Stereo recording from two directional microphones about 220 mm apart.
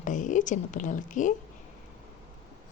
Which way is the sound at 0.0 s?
35° left (ahead or behind).